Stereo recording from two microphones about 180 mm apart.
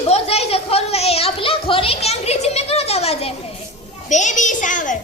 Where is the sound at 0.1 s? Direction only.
35° left (ahead or behind).